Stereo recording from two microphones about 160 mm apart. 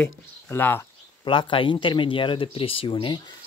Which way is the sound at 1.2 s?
30° left (ahead or behind).